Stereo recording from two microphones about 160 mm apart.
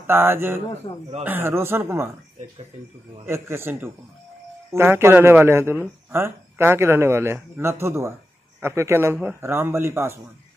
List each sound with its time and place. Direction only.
0.0 s speech: 15° right (ahead or behind)
3.3 s speech: 15° right (ahead or behind)